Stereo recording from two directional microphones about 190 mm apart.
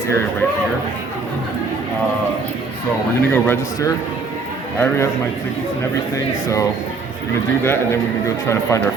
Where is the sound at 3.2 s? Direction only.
10° left (ahead or behind).